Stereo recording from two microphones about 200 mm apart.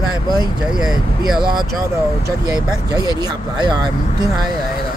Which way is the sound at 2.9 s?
20° right (ahead or behind).